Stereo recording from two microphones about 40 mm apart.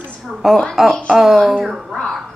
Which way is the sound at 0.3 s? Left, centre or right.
Centre.